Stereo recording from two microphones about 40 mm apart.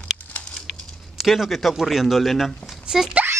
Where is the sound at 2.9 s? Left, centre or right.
Centre.